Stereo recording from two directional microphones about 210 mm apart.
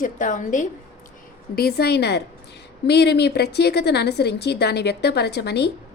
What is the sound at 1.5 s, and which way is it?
A woman's voice, 50° left (ahead or behind).